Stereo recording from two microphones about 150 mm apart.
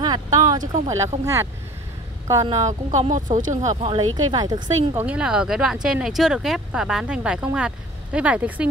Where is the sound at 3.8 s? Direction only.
30° right (ahead or behind).